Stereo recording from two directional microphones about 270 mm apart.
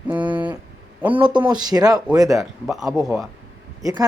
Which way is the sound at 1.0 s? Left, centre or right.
Centre.